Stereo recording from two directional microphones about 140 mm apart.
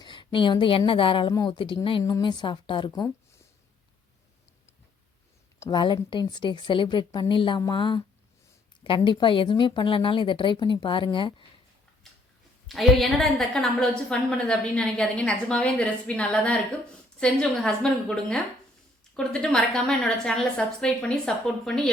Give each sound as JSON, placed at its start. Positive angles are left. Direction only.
{"t": 0.0, "sound": "a sound", "side_deg": 35}
{"t": 0.9, "sound": "speech", "side_deg": 40}
{"t": 1.3, "sound": "speech", "side_deg": 25}
{"t": 1.5, "sound": "speech", "side_deg": 35}
{"t": 5.7, "sound": "speech", "side_deg": 35}
{"t": 12.0, "sound": "a sound", "side_deg": 0}
{"t": 12.6, "sound": "a woman's voice", "side_deg": 0}